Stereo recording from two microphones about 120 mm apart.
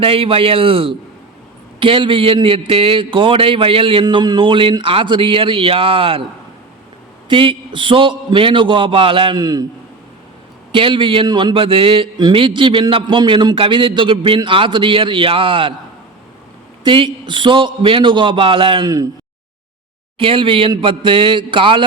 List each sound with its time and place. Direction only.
0.0 s speech: 50° right (ahead or behind)
7.3 s speech: 45° right (ahead or behind)
10.7 s speech: 45° right (ahead or behind)
16.8 s speech: 45° right (ahead or behind)
20.1 s speech: 45° right (ahead or behind)